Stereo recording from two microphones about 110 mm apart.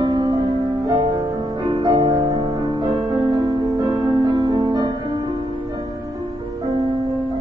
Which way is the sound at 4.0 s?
45° right (ahead or behind).